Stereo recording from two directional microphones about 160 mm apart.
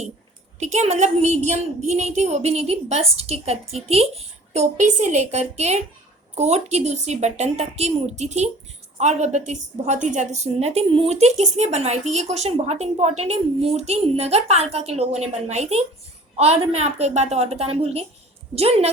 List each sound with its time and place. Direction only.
0.6 s a woman's voice: 45° right (ahead or behind)